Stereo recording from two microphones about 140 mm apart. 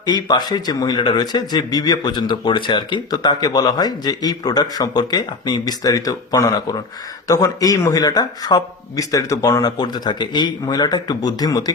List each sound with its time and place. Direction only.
0.0 s a man's voice: 30° left (ahead or behind)